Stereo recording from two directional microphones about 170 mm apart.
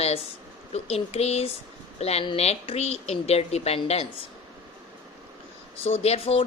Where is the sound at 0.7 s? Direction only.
35° left (ahead or behind).